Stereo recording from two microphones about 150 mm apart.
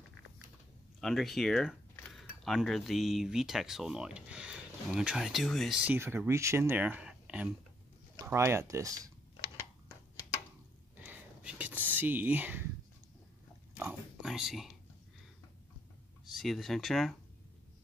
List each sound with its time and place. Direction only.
1.0 s speech: centre (ahead or behind)
8.3 s speech: 20° right (ahead or behind)
11.0 s whispering: 10° right (ahead or behind)
13.7 s a sound: 5° right (ahead or behind)
16.3 s speech: centre (ahead or behind)